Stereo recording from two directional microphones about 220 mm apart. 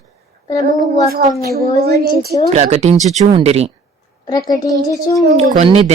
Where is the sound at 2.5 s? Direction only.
30° right (ahead or behind).